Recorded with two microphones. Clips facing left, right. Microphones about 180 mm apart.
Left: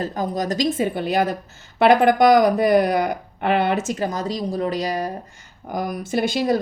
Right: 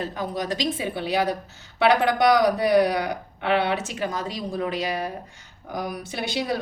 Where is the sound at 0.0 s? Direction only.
40° left (ahead or behind).